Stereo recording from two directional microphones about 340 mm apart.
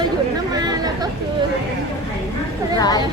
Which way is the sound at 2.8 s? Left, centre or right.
Centre.